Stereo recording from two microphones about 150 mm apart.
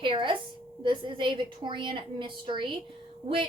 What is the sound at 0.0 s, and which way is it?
A woman's voice, 35° right (ahead or behind).